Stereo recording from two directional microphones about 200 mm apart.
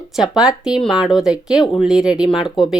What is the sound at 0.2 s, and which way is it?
Speech, 5° right (ahead or behind).